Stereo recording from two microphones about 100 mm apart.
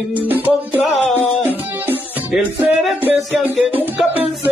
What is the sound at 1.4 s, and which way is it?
Music, 20° right (ahead or behind).